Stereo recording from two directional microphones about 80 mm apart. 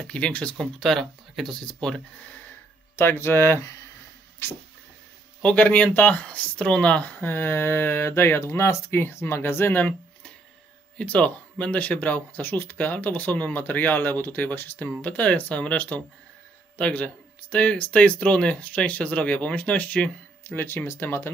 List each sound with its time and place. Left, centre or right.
0.0 s speech: centre
3.0 s speech: left
5.4 s speech: centre
7.2 s speech: left
11.0 s speech: centre
20.4 s speech: left